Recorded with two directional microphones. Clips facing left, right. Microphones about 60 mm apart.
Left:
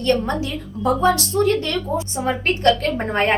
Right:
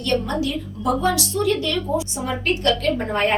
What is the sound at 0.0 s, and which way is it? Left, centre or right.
A woman's voice, left.